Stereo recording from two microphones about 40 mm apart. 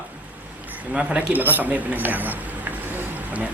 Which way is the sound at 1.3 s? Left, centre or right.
Right.